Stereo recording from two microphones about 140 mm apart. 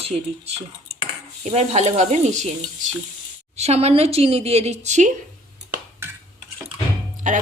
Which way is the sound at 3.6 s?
50° right (ahead or behind).